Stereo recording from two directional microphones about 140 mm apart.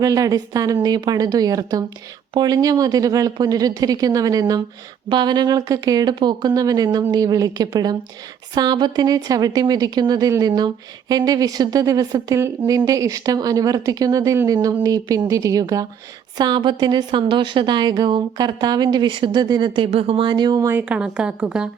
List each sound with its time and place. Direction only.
0.0 s a woman's voice: 25° right (ahead or behind)
20.8 s a woman's voice: 5° right (ahead or behind)